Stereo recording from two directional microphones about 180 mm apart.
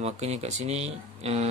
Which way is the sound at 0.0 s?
35° right (ahead or behind).